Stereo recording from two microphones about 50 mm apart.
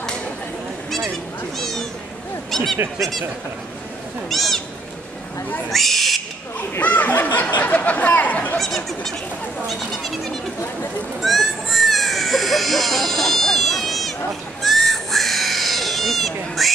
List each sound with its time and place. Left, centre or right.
1.6 s cat: centre
2.5 s speech: centre
4.3 s speech: centre
5.7 s owl: centre
6.8 s speech: left
8.5 s speech: centre
11.1 s a sound: centre
14.6 s cat: centre